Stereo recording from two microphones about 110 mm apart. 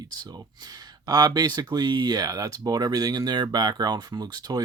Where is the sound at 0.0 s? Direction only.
40° right (ahead or behind).